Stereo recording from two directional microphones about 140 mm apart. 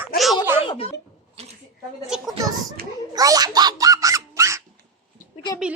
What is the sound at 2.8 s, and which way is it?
Speech, 90° right.